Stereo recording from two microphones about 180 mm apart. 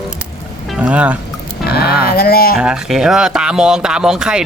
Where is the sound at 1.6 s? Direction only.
60° left (ahead or behind).